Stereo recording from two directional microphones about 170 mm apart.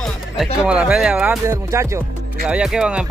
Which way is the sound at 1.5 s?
15° right (ahead or behind).